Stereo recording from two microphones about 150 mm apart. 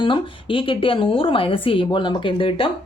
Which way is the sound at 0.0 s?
35° left (ahead or behind).